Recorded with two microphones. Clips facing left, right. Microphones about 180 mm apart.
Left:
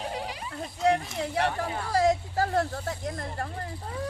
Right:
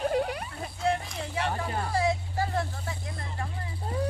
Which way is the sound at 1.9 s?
40° left (ahead or behind).